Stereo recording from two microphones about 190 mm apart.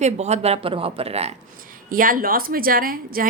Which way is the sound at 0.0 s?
35° right (ahead or behind).